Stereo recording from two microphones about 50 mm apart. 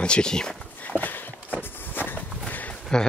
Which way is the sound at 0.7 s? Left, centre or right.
Left.